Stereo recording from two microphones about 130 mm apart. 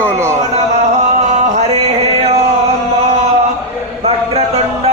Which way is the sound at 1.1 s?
65° right (ahead or behind).